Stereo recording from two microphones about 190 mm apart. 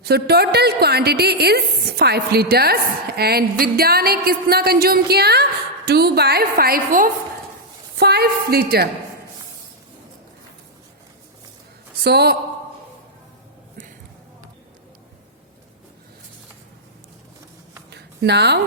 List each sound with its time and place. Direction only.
0.0 s a woman's voice: 55° right (ahead or behind)
7.9 s a woman's voice: 60° right (ahead or behind)
12.0 s a woman's voice: 55° right (ahead or behind)
17.9 s a sound: 60° right (ahead or behind)